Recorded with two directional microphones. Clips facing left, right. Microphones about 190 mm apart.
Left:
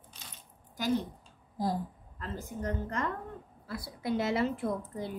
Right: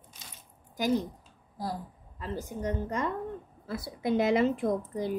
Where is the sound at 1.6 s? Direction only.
20° left (ahead or behind).